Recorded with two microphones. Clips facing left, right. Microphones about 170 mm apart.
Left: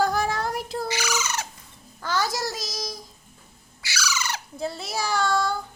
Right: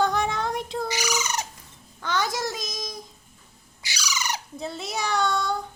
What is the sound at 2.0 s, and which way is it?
Speech, centre (ahead or behind).